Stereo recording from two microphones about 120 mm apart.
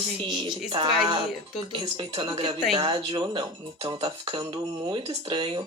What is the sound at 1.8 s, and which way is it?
Speech, 40° right (ahead or behind).